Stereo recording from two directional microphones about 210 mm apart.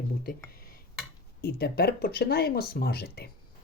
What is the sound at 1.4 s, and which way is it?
Speech, 50° left (ahead or behind).